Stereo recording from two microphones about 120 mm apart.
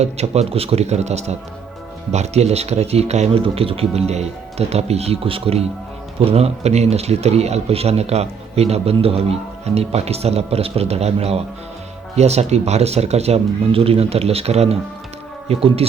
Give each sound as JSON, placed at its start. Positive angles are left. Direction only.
{"t": 0.0, "sound": "speech", "side_deg": -65}